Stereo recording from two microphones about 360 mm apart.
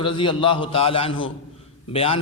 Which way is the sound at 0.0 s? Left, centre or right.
Centre.